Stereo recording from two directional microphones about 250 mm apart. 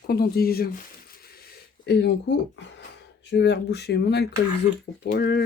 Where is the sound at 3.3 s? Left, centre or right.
Left.